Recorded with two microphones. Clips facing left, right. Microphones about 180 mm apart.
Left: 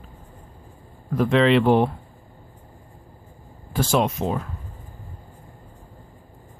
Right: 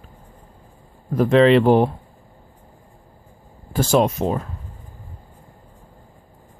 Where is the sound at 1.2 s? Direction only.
40° right (ahead or behind).